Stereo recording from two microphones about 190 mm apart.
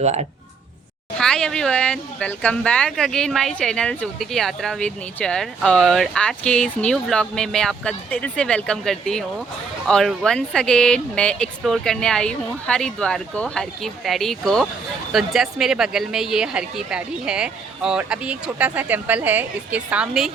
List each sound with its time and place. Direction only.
0.0 s speech: 35° right (ahead or behind)
1.2 s speech: 5° left (ahead or behind)